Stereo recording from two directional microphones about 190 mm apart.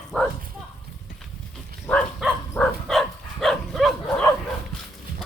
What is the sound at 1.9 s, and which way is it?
Dog, 5° left (ahead or behind).